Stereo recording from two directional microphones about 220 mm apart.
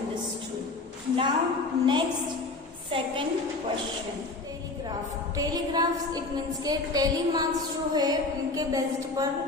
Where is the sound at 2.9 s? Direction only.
25° right (ahead or behind).